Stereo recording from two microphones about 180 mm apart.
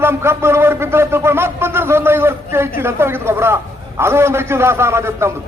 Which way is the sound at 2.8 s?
15° right (ahead or behind).